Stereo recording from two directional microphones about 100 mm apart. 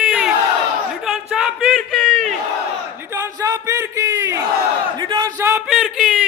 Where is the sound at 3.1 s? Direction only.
35° right (ahead or behind).